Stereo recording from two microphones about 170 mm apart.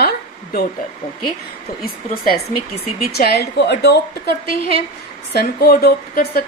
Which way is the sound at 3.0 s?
70° left (ahead or behind).